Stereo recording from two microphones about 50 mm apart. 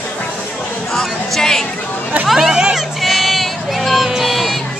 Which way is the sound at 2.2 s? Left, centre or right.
Centre.